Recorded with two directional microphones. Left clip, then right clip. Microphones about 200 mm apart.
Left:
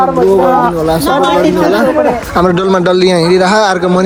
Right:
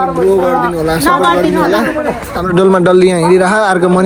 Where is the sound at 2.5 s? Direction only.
5° right (ahead or behind).